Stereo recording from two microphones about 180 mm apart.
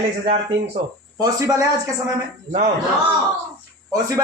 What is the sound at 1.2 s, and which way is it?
Speech, 20° right (ahead or behind).